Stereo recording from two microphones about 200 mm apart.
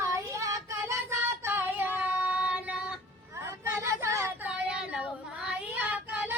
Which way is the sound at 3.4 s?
10° right (ahead or behind).